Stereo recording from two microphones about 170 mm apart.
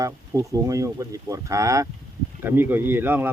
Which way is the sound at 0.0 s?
20° right (ahead or behind).